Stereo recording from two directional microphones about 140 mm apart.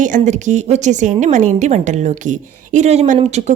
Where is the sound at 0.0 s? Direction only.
60° right (ahead or behind).